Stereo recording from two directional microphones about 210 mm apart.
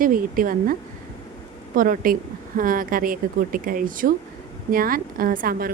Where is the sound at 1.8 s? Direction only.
40° right (ahead or behind).